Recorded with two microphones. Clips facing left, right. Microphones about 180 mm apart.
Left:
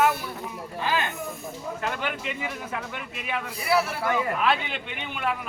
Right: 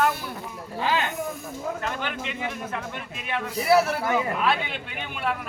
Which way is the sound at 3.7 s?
45° right (ahead or behind).